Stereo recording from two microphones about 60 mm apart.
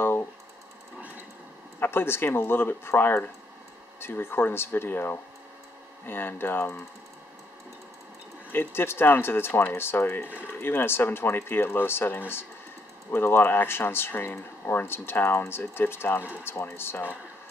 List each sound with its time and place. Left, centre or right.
0.0 s typing: left
1.8 s speech: left
8.5 s speech: left